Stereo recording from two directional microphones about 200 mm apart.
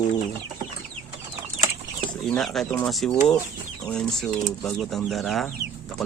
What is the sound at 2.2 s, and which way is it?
Speech, centre (ahead or behind).